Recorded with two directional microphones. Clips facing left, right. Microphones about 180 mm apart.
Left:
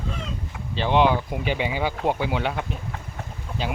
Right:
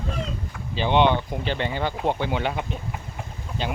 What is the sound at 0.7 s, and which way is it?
Speech, centre (ahead or behind).